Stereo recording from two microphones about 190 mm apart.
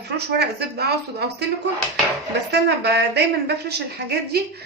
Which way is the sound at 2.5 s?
60° right (ahead or behind).